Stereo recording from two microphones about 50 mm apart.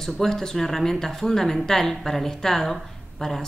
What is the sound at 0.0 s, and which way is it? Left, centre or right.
Speech, centre.